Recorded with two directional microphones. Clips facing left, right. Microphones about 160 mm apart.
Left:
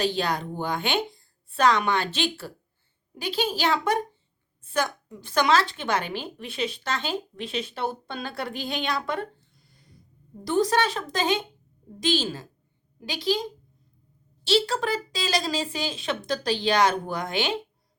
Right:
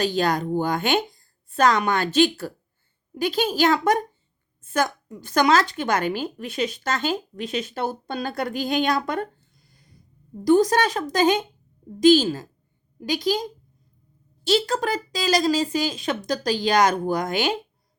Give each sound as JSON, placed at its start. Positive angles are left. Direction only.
{"t": 0.0, "sound": "a woman's voice", "side_deg": -45}
{"t": 14.4, "sound": "a woman's voice", "side_deg": -40}